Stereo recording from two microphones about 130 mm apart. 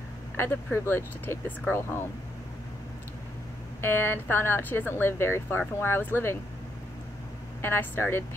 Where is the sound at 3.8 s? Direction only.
15° left (ahead or behind).